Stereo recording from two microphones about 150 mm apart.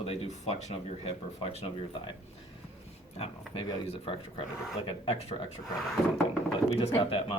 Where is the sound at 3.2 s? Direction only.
40° left (ahead or behind).